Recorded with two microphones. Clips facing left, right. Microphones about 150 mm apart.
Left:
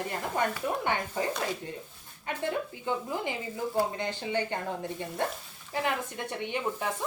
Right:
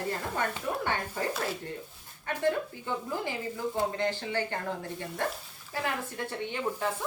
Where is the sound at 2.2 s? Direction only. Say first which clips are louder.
Right 3 dB; 15° left (ahead or behind).